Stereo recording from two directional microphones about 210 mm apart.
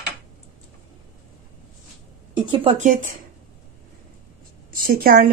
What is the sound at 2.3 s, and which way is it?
Speech, 25° right (ahead or behind).